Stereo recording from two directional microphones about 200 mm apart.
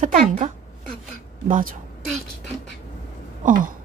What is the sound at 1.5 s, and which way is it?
Speech, 45° right (ahead or behind).